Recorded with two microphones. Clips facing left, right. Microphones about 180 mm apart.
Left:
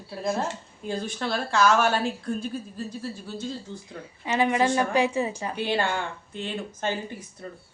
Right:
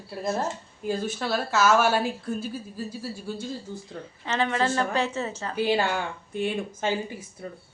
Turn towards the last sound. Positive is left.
turn(degrees=-5)  # may be behind; listen again after turning